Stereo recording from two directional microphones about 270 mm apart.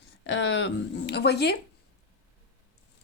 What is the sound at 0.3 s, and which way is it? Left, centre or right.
Speech, left.